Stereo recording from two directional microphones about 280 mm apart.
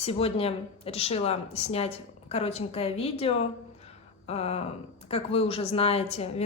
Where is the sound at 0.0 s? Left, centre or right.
Left.